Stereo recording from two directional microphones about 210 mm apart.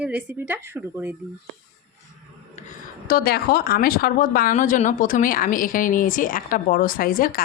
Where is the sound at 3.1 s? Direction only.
45° left (ahead or behind).